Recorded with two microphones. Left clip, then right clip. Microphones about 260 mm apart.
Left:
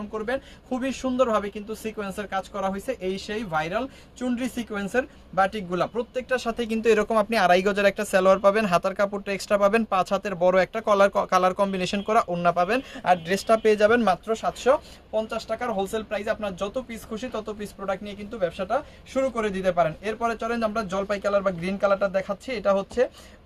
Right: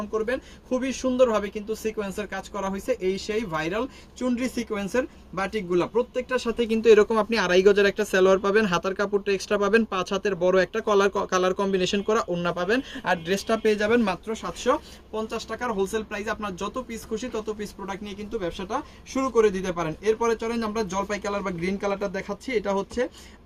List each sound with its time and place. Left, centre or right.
0.8 s speech: centre; by 14.3 s left
14.4 s speech: centre